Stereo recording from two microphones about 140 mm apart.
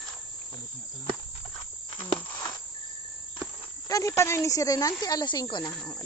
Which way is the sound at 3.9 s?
20° left (ahead or behind).